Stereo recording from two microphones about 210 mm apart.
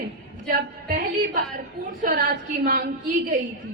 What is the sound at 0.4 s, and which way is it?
Speech, 45° right (ahead or behind).